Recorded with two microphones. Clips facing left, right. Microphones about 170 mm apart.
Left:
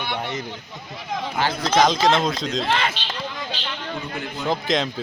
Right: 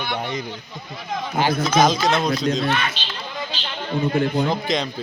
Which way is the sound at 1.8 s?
10° right (ahead or behind).